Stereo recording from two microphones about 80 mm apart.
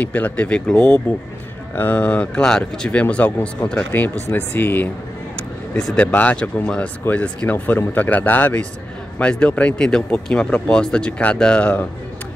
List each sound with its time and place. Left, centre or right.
0.0 s speech: centre
5.9 s speech: centre